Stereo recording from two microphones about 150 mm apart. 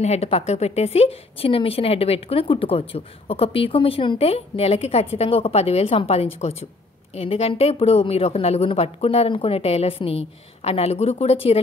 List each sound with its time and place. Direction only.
0.0 s a woman's voice: 45° left (ahead or behind)